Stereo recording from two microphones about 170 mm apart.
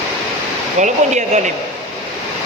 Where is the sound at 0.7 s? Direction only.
45° right (ahead or behind).